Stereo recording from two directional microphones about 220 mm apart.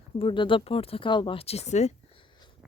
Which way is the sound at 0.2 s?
25° left (ahead or behind).